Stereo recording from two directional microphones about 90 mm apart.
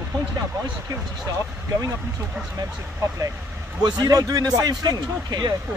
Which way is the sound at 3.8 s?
45° right (ahead or behind).